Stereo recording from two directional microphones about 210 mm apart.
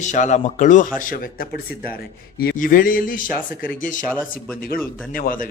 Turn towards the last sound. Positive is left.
turn(degrees=40)  # may be behind; listen again after turning